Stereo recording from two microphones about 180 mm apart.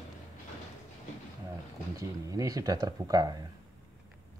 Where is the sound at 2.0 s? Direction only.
20° right (ahead or behind).